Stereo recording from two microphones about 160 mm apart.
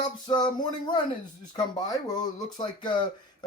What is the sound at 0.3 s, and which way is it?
Speech, 25° left (ahead or behind).